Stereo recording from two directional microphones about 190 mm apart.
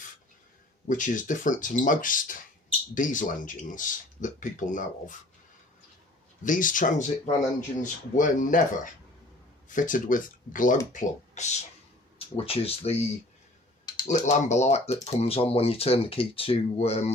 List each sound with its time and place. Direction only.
0.9 s speech: 45° left (ahead or behind)
6.4 s speech: 45° left (ahead or behind)
14.1 s speech: 40° left (ahead or behind)